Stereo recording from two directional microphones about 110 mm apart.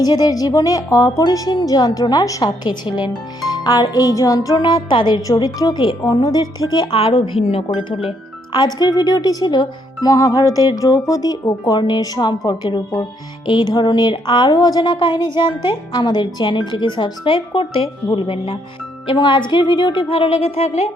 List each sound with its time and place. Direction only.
0.0 s a woman's voice: 35° left (ahead or behind)
6.9 s speech: 60° left (ahead or behind)
8.5 s a woman's voice: 40° left (ahead or behind)
19.0 s speech: 45° left (ahead or behind); by 20.9 s 85° left